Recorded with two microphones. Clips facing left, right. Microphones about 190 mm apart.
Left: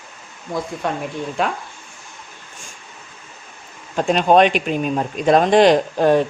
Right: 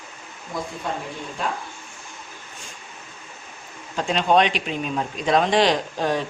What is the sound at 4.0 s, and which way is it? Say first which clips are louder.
Speech: left 5 dB; 50° left (ahead or behind).